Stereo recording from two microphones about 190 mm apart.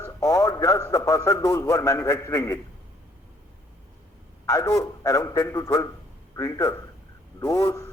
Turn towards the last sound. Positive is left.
turn(degrees=20)  # may be behind; listen again after turning